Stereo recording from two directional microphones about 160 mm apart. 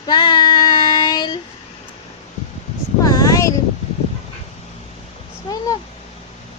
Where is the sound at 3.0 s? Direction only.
20° left (ahead or behind).